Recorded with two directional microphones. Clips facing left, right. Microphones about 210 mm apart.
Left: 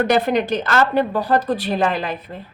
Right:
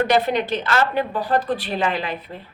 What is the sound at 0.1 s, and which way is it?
A woman's voice, 45° left (ahead or behind).